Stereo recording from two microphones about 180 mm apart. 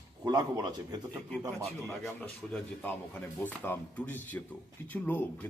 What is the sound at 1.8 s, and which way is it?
A man's voice, 5° left (ahead or behind).